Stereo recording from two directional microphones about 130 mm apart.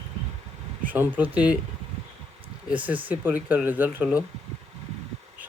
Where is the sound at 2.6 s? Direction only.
10° right (ahead or behind).